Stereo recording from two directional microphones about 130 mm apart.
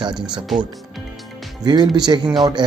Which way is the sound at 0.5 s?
Centre (ahead or behind).